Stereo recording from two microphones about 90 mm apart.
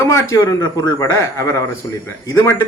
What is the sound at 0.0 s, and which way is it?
A man's voice, 35° left (ahead or behind).